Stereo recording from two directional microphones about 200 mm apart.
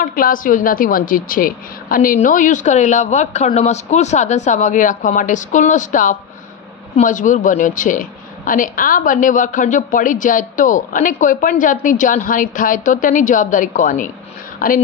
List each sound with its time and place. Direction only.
0.0 s a man's voice: 45° left (ahead or behind)